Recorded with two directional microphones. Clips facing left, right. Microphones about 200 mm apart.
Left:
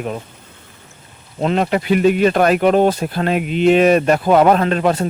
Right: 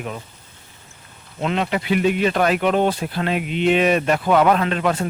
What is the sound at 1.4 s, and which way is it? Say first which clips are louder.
Speech: left 5 dB; 40° left (ahead or behind).